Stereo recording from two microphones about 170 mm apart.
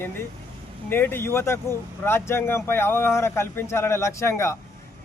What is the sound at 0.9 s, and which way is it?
Speech, 10° left (ahead or behind).